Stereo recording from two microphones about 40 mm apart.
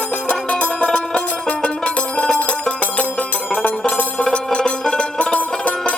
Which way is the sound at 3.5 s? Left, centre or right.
Left.